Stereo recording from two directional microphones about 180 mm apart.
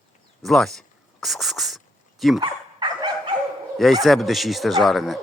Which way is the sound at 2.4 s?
25° right (ahead or behind).